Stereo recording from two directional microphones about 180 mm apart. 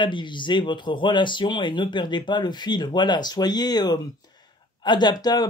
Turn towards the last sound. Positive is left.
turn(degrees=20)  # may be behind; listen again after turning